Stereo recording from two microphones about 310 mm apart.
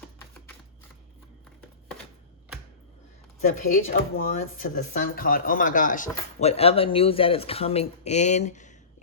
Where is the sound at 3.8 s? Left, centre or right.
Left.